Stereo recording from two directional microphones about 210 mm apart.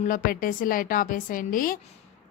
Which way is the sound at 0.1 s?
45° left (ahead or behind).